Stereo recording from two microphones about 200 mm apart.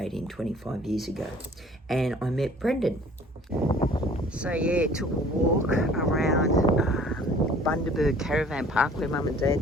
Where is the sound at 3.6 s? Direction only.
30° left (ahead or behind).